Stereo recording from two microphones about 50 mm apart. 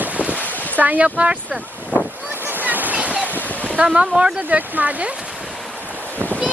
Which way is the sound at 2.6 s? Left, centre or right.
Right.